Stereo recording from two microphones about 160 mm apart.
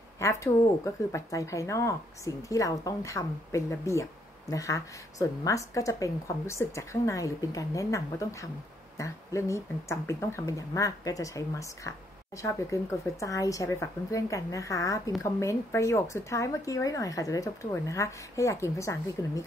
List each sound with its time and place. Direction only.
0.2 s speech: 20° left (ahead or behind)